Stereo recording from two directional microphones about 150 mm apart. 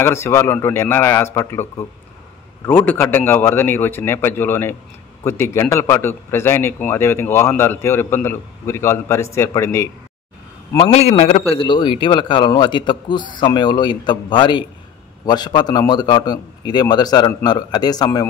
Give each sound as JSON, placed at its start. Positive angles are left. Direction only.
{"t": 0.0, "sound": "a man's voice", "side_deg": 15}
{"t": 10.8, "sound": "a man's voice", "side_deg": 45}
{"t": 11.5, "sound": "a man's voice", "side_deg": 35}